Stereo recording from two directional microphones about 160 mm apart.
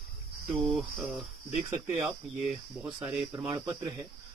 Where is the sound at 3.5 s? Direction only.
25° right (ahead or behind).